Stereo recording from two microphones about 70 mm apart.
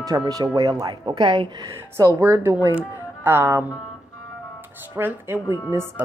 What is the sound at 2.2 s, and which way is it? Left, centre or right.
Speech, right.